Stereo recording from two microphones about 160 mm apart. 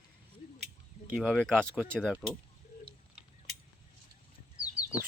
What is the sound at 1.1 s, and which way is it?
Speech, centre (ahead or behind).